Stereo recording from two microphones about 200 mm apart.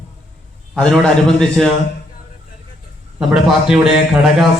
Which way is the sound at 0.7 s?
5° left (ahead or behind).